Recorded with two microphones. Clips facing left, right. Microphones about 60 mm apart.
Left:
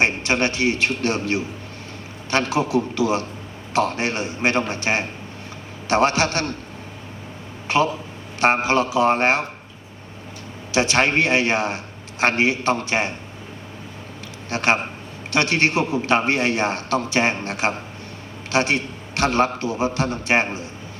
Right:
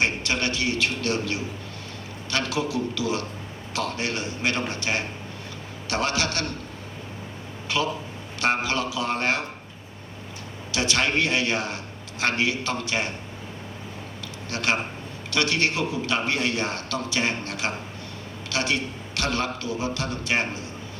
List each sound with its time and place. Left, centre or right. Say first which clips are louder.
0.0 s a man's voice: left 5 dB; left
7.7 s a man's voice: left 6 dB; left
10.7 s a man's voice: left 6 dB; left
14.5 s a man's voice: left 5 dB; left